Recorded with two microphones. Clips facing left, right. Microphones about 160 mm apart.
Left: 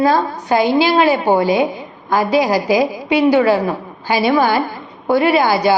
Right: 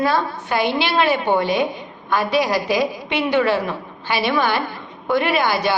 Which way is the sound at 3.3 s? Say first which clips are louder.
Left 4 dB; 35° left (ahead or behind).